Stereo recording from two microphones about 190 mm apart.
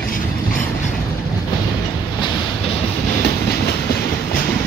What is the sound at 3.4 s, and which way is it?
Train, 55° left (ahead or behind).